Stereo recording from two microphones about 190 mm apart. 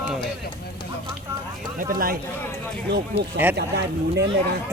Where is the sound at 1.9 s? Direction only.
50° right (ahead or behind).